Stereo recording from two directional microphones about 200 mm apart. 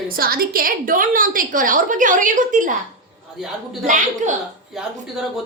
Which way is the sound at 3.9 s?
40° right (ahead or behind).